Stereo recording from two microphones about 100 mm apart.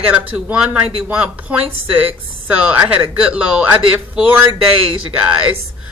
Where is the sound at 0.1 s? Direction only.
10° right (ahead or behind).